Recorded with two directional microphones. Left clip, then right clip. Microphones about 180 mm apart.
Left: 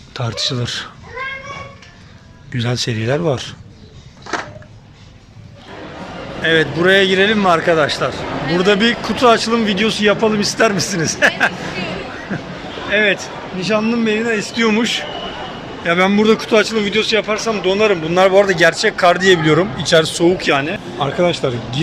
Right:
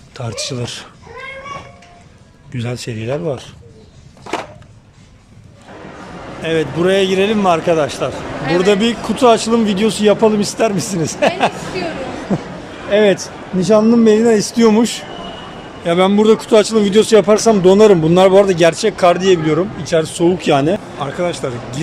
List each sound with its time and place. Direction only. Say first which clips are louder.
0.1 s a man's voice: left 3 dB; 5° right (ahead or behind)
2.5 s speech: left 4 dB; 5° right (ahead or behind)
6.4 s a man's voice: left 2 dB; 10° right (ahead or behind)
20.5 s a man's voice: right 3 dB; 30° right (ahead or behind)
21.0 s speech: left 3 dB; centre (ahead or behind)